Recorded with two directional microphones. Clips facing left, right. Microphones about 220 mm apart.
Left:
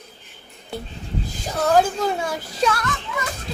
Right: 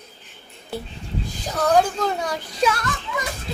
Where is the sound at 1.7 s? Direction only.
5° left (ahead or behind).